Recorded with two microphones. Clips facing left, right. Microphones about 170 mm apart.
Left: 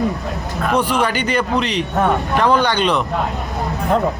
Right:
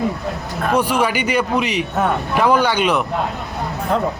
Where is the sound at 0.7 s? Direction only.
10° right (ahead or behind).